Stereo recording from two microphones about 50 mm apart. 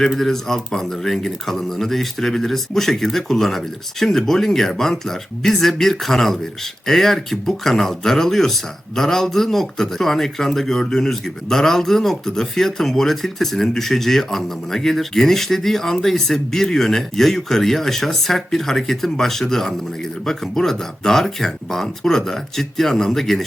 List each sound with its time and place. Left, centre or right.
0.2 s speech: centre